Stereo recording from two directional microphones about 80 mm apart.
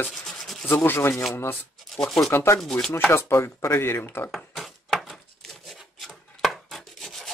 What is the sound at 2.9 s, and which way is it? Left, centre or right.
Speech, left.